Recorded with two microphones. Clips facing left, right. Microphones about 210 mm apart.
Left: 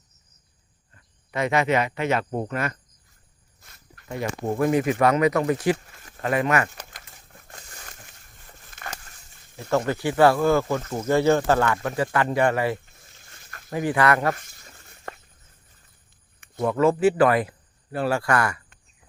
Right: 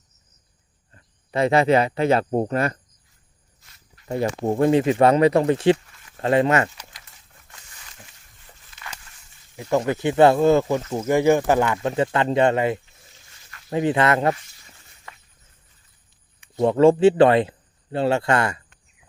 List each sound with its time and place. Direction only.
0.9 s speech: 30° right (ahead or behind)
4.1 s speech: 30° right (ahead or behind)
6.7 s crumpling: 50° left (ahead or behind)
9.6 s speech: 15° right (ahead or behind)
13.3 s a sound: 50° left (ahead or behind)
13.7 s speech: 25° right (ahead or behind)
14.3 s a sound: 50° left (ahead or behind)
16.6 s speech: 30° right (ahead or behind)